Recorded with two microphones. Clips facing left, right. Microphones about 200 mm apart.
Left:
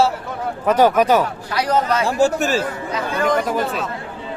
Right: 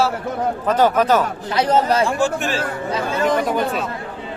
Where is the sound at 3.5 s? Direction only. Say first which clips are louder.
Right 1 dB; centre (ahead or behind).